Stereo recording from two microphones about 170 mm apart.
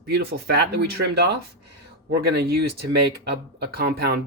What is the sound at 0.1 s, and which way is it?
Speech, 70° right (ahead or behind).